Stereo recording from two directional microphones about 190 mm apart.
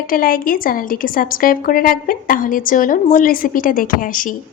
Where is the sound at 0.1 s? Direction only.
50° left (ahead or behind).